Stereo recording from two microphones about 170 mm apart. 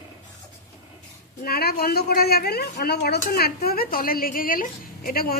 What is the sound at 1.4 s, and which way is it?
Speech, 65° left (ahead or behind).